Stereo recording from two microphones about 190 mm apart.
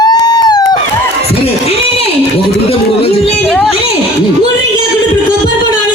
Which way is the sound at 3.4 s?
Centre (ahead or behind).